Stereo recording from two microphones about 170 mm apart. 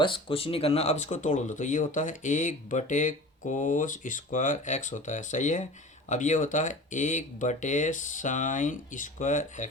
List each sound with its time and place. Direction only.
0.0 s speech: 30° left (ahead or behind); by 9.6 s 50° left (ahead or behind)